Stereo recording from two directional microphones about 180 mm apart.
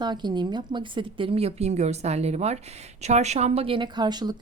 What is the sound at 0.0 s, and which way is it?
Speech, 25° right (ahead or behind).